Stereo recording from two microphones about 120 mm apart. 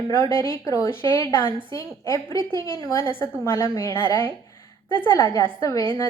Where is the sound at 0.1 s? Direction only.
20° left (ahead or behind).